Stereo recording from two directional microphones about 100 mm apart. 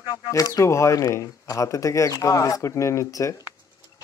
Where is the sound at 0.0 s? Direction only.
45° left (ahead or behind).